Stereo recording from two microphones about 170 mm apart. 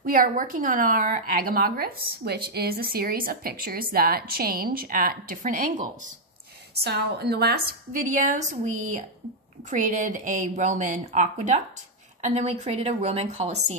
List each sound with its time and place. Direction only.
0.0 s a woman's voice: 55° right (ahead or behind)
6.8 s a woman's voice: 70° right (ahead or behind); by 13.7 s 40° right (ahead or behind)